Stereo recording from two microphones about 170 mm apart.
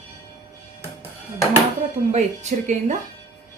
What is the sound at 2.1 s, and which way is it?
Speech, 40° right (ahead or behind).